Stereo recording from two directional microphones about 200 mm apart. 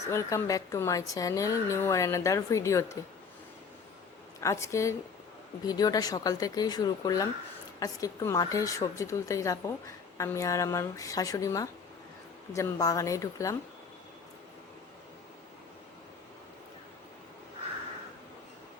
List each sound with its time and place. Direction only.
0.1 s a woman's voice: 15° left (ahead or behind)
4.4 s a woman's voice: 15° left (ahead or behind)